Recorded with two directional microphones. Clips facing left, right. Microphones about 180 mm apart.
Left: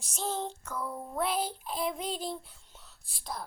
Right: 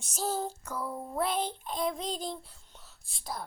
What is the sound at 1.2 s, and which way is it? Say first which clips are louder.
Child singing: left 1 dB; 5° left (ahead or behind).